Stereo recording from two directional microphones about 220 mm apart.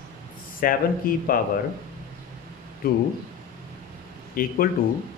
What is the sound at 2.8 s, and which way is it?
Speech, 45° left (ahead or behind).